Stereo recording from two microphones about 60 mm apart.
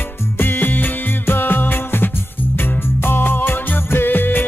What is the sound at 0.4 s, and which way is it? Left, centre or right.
Music, left.